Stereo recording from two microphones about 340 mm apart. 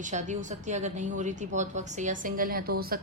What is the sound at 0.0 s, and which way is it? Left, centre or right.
A woman's voice, right.